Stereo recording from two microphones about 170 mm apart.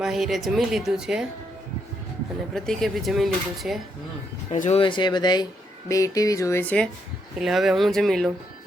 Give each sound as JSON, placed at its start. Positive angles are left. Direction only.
{"t": 0.0, "sound": "speech", "side_deg": 0}
{"t": 2.6, "sound": "speech", "side_deg": 0}
{"t": 4.5, "sound": "speech", "side_deg": 45}
{"t": 4.8, "sound": "speech", "side_deg": 30}
{"t": 7.3, "sound": "speech", "side_deg": 0}